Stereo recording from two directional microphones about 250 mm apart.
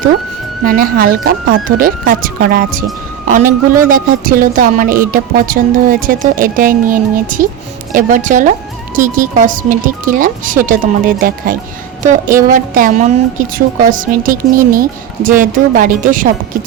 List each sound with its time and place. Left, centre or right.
0.6 s speech: right